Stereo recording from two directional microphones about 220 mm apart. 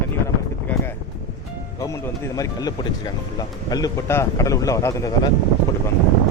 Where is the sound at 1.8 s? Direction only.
15° left (ahead or behind).